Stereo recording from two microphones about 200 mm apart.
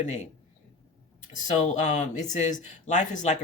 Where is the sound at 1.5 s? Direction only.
35° left (ahead or behind).